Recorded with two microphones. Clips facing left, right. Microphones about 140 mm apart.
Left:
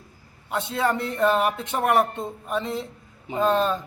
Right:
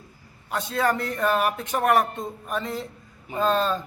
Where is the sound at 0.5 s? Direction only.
20° left (ahead or behind).